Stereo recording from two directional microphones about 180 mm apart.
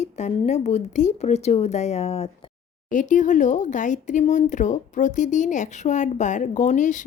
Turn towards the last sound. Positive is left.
turn(degrees=45)  # may be behind; listen again after turning